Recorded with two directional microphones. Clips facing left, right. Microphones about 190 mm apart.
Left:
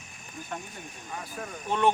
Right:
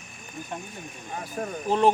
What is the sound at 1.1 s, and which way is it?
Speech, 35° right (ahead or behind).